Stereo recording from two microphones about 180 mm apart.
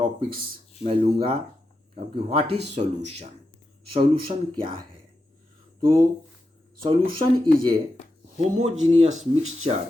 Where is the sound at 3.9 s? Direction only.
30° right (ahead or behind).